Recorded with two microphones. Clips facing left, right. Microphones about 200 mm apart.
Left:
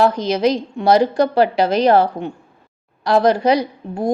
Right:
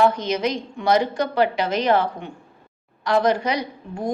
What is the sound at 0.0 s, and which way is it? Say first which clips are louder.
Speech: left 4 dB; 35° left (ahead or behind).